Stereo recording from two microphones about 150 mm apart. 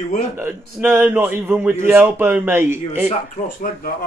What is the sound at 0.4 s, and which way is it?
Speech, 15° right (ahead or behind).